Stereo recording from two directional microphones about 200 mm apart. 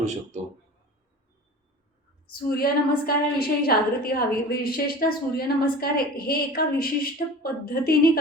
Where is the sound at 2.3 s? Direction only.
50° left (ahead or behind).